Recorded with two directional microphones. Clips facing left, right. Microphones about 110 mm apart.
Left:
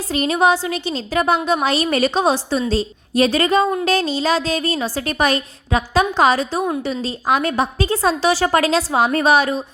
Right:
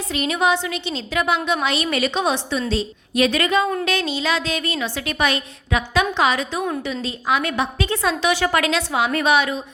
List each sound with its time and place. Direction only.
0.1 s a woman's voice: 35° left (ahead or behind)